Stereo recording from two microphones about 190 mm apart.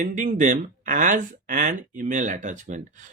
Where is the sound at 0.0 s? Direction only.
40° right (ahead or behind).